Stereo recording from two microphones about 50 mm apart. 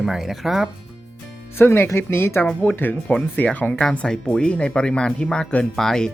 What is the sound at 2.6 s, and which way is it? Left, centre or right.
Speech, left.